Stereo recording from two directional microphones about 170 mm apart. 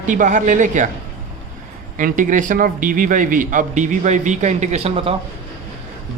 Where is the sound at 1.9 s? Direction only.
50° right (ahead or behind); by 5.2 s 35° right (ahead or behind).